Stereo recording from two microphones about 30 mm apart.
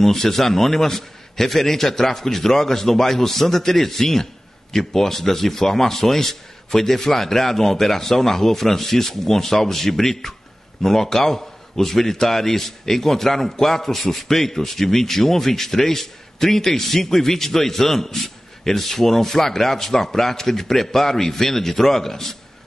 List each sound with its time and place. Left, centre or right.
0.0 s a man's voice: centre